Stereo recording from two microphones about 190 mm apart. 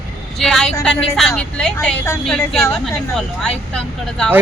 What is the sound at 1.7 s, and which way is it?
Speech, 15° left (ahead or behind).